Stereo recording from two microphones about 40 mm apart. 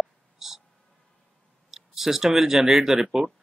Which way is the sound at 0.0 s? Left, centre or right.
Centre.